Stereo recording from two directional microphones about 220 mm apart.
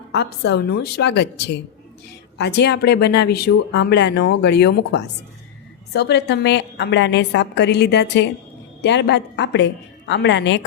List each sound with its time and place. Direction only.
0.1 s speech: 50° left (ahead or behind)
2.4 s speech: 50° left (ahead or behind)